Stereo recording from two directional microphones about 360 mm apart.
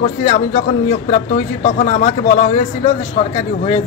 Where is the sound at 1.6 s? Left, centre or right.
Left.